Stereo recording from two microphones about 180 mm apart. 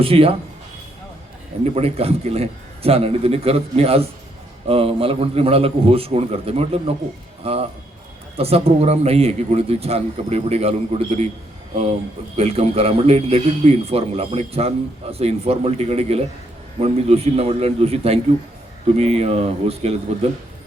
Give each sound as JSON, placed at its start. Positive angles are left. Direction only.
{"t": 0.0, "sound": "a man's voice", "side_deg": -30}
{"t": 1.6, "sound": "a man's voice", "side_deg": -35}